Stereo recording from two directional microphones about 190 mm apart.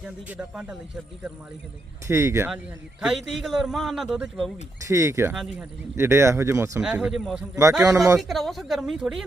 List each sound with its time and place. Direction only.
0.0 s a man's voice: 5° right (ahead or behind)
2.0 s speech: 15° right (ahead or behind)
3.0 s a man's voice: centre (ahead or behind)
4.9 s speech: 15° right (ahead or behind)
5.3 s a man's voice: centre (ahead or behind)
6.0 s speech: 15° right (ahead or behind)
7.9 s speech: 15° right (ahead or behind)
8.2 s a man's voice: centre (ahead or behind)